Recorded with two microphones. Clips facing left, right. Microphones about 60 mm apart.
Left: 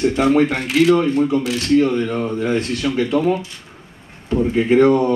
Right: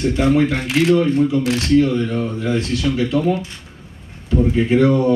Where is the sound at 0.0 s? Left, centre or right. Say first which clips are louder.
Left 1 dB; left.